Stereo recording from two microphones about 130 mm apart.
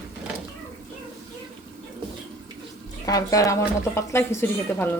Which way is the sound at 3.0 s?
25° left (ahead or behind).